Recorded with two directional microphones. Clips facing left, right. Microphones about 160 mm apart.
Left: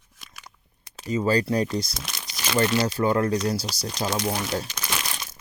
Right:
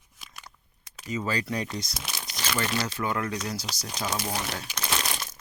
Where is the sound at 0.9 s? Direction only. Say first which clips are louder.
Left 8 dB; 35° left (ahead or behind).